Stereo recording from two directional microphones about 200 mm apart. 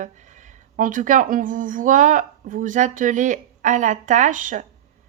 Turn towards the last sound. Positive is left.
turn(degrees=-40)  # may be behind; listen again after turning